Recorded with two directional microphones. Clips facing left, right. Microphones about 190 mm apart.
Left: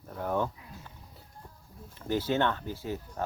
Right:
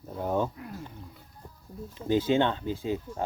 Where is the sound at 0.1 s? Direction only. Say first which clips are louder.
Right 2 dB; 20° right (ahead or behind).